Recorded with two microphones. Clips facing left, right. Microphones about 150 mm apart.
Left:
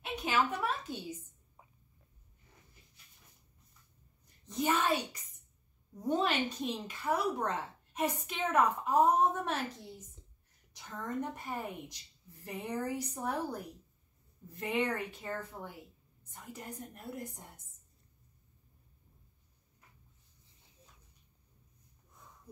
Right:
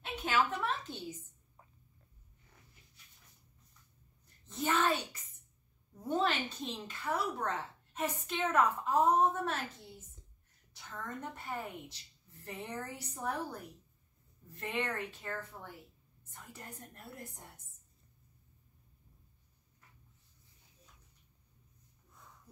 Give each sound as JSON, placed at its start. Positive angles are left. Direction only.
{"t": 0.0, "sound": "a woman's voice", "side_deg": 15}
{"t": 4.5, "sound": "a woman's voice", "side_deg": 10}
{"t": 14.6, "sound": "a woman's voice", "side_deg": 15}